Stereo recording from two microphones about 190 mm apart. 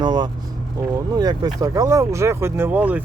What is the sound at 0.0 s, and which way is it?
Vehicle, 20° right (ahead or behind).